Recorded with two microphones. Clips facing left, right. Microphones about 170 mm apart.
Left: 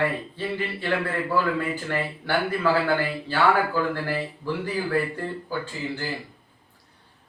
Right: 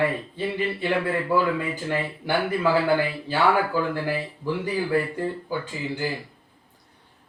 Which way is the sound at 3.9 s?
15° right (ahead or behind).